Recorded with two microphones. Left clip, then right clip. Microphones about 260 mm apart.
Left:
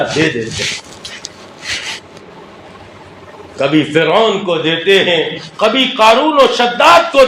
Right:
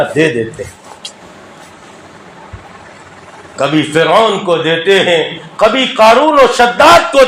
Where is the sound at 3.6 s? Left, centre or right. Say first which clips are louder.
Right 1 dB; right.